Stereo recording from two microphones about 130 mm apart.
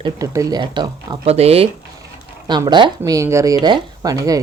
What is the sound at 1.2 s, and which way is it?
Speech, 50° right (ahead or behind).